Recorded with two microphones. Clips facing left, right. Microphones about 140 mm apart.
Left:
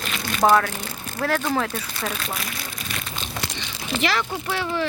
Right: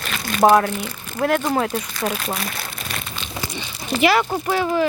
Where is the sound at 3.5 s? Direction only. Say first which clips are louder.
Right 6 dB; 5° right (ahead or behind).